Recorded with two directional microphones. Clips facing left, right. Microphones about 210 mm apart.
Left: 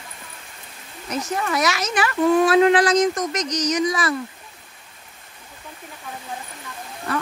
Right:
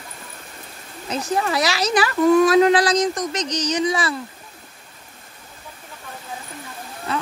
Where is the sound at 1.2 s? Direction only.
30° right (ahead or behind).